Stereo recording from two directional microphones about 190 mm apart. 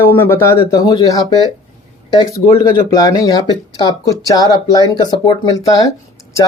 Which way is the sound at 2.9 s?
20° left (ahead or behind).